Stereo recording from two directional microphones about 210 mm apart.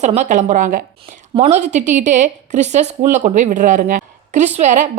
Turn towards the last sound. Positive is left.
turn(degrees=-35)  # may be behind; listen again after turning